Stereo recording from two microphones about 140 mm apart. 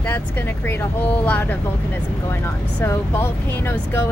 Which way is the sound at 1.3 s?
15° left (ahead or behind).